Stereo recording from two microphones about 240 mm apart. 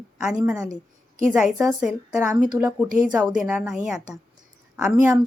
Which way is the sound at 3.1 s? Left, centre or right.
Centre.